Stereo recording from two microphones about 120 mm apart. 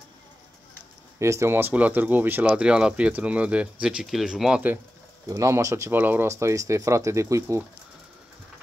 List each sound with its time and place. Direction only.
1.2 s speech: 25° right (ahead or behind); by 4.7 s 5° right (ahead or behind)
5.3 s speech: 25° right (ahead or behind)